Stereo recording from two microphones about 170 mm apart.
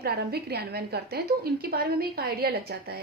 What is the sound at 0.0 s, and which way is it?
A woman's voice, 70° right (ahead or behind).